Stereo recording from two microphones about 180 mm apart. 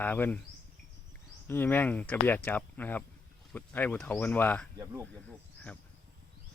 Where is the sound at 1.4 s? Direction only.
10° left (ahead or behind).